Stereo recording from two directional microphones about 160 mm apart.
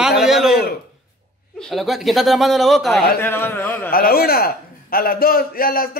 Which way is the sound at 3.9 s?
65° left (ahead or behind).